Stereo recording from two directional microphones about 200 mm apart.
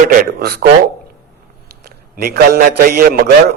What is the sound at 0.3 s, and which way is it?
Speech, 50° right (ahead or behind).